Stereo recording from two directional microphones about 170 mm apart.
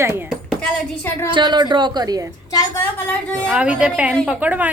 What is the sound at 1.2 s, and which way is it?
A woman's voice, 25° right (ahead or behind).